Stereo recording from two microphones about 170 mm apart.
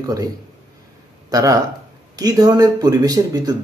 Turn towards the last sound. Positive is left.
turn(degrees=-20)  # may be behind; listen again after turning